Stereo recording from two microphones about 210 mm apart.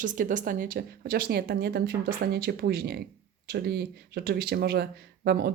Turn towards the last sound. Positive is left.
turn(degrees=-50)  # may be behind; listen again after turning